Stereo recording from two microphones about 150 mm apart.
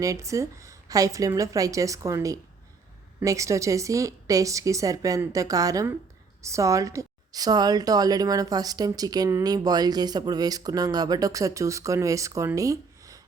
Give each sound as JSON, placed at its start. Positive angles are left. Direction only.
{"t": 0.0, "sound": "a woman's voice", "side_deg": -20}